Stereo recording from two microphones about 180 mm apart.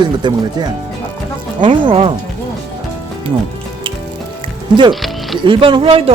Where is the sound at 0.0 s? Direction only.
25° right (ahead or behind).